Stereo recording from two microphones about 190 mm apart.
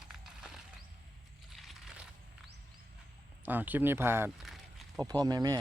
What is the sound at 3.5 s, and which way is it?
Speech, 10° right (ahead or behind).